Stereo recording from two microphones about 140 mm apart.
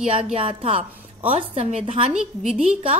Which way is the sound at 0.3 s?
40° right (ahead or behind).